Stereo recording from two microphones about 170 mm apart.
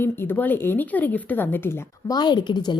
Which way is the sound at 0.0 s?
10° left (ahead or behind).